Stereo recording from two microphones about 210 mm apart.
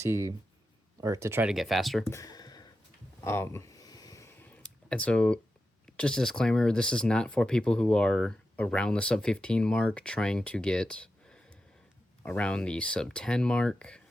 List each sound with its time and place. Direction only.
0.0 s speech: 15° right (ahead or behind)
2.0 s a sound: 15° left (ahead or behind)
6.0 s speech: 5° left (ahead or behind)